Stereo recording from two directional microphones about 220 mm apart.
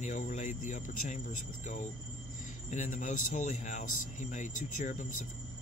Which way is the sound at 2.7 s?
35° left (ahead or behind).